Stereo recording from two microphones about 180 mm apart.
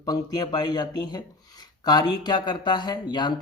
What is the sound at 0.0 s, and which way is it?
Speech, 20° left (ahead or behind).